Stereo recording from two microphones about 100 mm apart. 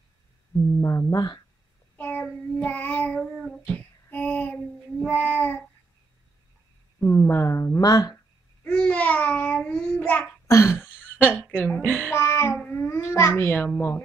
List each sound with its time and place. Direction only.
0.7 s speech: 30° left (ahead or behind)
2.0 s child singing: 15° left (ahead or behind)
7.1 s speech: 25° left (ahead or behind)
7.8 s speech: 35° left (ahead or behind)
8.6 s child singing: 15° left (ahead or behind)
10.4 s a sound: 30° left (ahead or behind)
11.5 s child singing: 10° left (ahead or behind)
12.1 s child singing: 25° left (ahead or behind)
12.6 s babbling: 25° left (ahead or behind)
13.3 s speech: 20° left (ahead or behind)